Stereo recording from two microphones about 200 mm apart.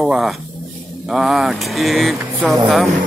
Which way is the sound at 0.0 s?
Centre (ahead or behind).